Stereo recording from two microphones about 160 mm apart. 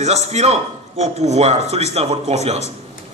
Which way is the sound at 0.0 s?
45° right (ahead or behind).